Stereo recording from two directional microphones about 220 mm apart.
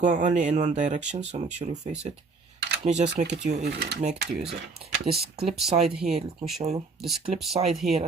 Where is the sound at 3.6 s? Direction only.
50° right (ahead or behind).